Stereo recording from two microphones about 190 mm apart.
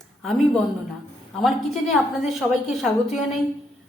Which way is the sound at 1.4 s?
Centre (ahead or behind).